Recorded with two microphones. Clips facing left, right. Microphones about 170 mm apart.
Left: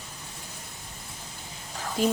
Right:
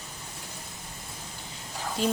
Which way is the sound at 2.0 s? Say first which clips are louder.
Left 2 dB; 15° left (ahead or behind).